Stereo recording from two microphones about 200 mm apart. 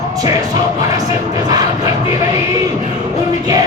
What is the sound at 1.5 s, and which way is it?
Music, 20° right (ahead or behind).